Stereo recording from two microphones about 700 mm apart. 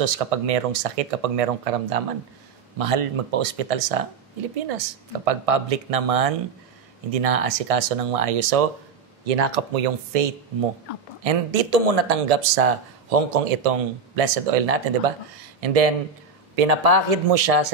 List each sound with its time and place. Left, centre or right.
0.0 s speech: right
9.2 s speech: right
10.9 s speech: left
11.2 s speech: right